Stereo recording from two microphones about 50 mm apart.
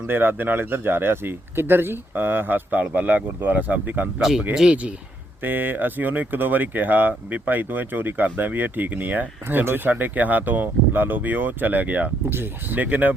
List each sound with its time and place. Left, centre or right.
0.1 s speech: right
4.2 s speech: centre
4.7 s speech: right
5.4 s speech: right